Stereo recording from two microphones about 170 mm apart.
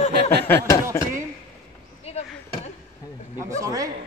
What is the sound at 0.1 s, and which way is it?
Snicker, 80° right.